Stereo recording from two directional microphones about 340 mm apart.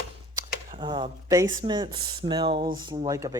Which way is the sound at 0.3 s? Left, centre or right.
Centre.